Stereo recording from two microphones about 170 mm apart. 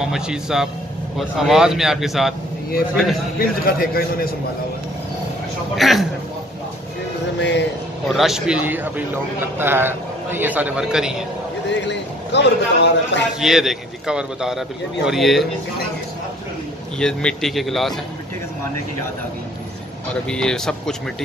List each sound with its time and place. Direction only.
0.0 s a man's voice: 5° right (ahead or behind)
3.3 s a man's voice: 60° left (ahead or behind)
5.8 s a man's voice: centre (ahead or behind)
7.3 s vehicle: 90° left
8.1 s a man's voice: centre (ahead or behind)
11.7 s a man's voice: 90° left
13.4 s a man's voice: 5° right (ahead or behind)
17.0 s a man's voice: 5° left (ahead or behind)
20.2 s a man's voice: 5° left (ahead or behind)